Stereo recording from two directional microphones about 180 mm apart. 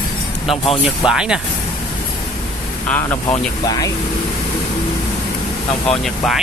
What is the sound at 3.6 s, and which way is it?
Speech, 20° left (ahead or behind).